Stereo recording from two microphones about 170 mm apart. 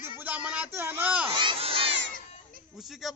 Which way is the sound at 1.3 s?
30° right (ahead or behind).